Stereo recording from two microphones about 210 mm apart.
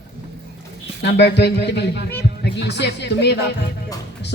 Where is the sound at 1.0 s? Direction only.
50° left (ahead or behind).